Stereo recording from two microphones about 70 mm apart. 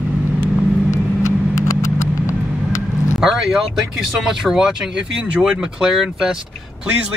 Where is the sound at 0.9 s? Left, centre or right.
Left.